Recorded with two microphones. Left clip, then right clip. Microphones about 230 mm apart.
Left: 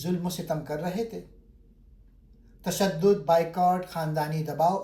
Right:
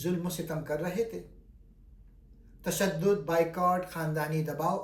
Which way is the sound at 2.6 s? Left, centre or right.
Centre.